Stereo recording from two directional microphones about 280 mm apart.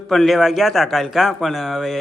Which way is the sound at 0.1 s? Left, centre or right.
Centre.